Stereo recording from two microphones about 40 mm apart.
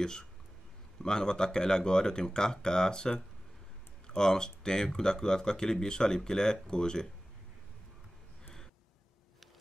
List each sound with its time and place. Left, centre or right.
0.0 s speech: centre